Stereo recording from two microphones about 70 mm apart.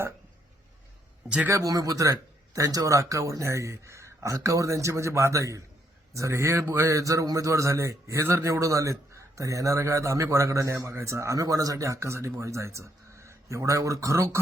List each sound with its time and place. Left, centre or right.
1.5 s a man's voice: right